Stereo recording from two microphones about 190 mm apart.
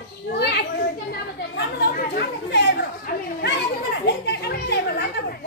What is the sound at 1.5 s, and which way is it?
Chatter, 60° left (ahead or behind).